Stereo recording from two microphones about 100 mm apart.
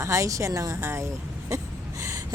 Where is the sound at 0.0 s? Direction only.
30° right (ahead or behind).